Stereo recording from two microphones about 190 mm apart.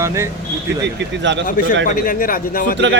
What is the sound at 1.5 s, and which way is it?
Speech, 45° left (ahead or behind).